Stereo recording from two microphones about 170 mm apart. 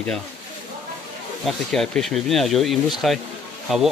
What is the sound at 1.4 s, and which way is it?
Speech, centre (ahead or behind).